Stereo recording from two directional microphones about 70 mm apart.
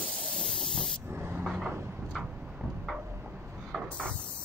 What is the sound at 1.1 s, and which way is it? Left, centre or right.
Vehicle, right.